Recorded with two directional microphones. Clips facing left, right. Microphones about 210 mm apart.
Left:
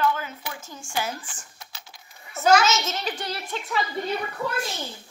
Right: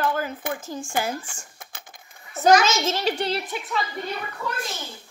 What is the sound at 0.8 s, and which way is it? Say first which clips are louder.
Speech: even; 55° right (ahead or behind).